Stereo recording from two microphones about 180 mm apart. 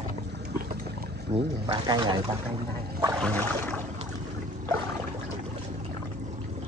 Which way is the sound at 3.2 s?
10° left (ahead or behind).